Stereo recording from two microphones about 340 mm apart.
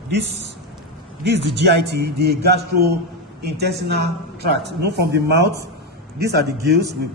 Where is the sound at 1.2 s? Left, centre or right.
Right.